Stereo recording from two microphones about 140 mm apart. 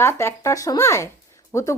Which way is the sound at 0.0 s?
20° left (ahead or behind).